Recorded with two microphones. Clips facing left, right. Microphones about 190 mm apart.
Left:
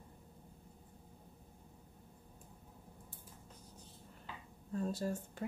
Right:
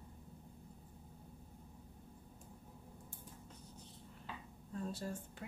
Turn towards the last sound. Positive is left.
turn(degrees=40)  # may be behind; listen again after turning